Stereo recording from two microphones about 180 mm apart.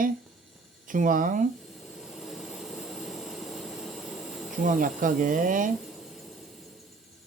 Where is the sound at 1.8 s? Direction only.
Centre (ahead or behind).